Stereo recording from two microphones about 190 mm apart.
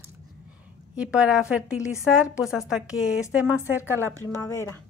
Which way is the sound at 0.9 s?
5° right (ahead or behind).